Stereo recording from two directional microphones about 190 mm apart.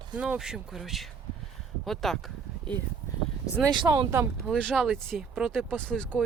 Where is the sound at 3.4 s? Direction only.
15° left (ahead or behind).